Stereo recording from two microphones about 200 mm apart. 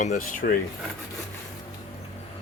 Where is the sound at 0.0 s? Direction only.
45° left (ahead or behind).